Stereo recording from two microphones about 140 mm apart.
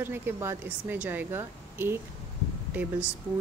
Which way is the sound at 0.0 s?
15° right (ahead or behind).